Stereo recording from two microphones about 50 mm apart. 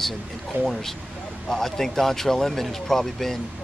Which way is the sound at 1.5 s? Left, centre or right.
Centre.